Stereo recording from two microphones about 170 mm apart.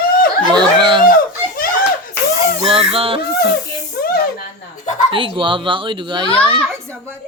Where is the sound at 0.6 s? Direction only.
25° right (ahead or behind).